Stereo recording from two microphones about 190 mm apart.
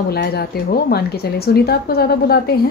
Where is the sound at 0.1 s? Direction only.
55° left (ahead or behind).